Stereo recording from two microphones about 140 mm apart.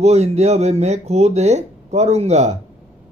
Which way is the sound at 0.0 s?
50° right (ahead or behind).